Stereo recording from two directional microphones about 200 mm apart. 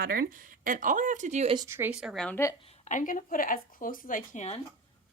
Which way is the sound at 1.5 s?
15° right (ahead or behind).